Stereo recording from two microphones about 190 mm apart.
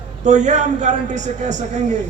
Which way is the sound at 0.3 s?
40° right (ahead or behind).